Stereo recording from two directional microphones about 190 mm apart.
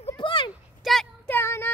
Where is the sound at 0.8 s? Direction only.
Centre (ahead or behind).